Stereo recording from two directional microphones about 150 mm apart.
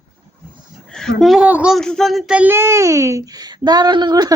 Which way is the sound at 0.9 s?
5° left (ahead or behind).